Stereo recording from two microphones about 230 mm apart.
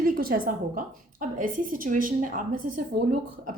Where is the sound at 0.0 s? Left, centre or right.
Right.